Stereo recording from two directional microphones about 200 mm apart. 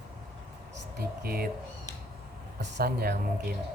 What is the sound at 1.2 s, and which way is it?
Speech, 50° right (ahead or behind).